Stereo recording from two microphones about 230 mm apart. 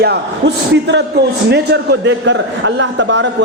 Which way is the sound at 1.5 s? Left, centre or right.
Right.